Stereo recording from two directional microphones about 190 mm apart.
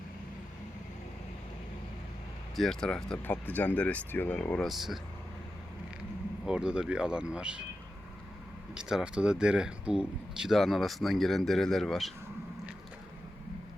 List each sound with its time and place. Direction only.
2.6 s speech: centre (ahead or behind)
6.4 s speech: 5° right (ahead or behind)
8.7 s speech: 5° right (ahead or behind)